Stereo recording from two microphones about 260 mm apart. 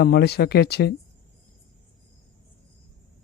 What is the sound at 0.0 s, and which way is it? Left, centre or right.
Speech, left.